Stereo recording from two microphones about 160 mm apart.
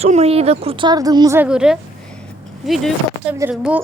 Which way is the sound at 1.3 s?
5° right (ahead or behind).